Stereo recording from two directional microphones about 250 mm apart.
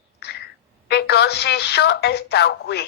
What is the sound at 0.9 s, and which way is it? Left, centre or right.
Speech, left.